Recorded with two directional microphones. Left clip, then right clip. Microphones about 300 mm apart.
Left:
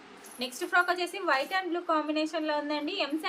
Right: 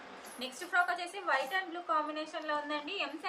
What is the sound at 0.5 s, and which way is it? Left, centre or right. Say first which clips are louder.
A woman's voice: left 5 dB; left.